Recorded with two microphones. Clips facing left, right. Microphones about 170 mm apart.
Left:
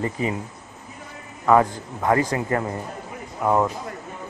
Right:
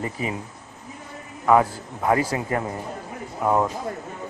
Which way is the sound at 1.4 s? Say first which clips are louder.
Left 1 dB; 10° right (ahead or behind).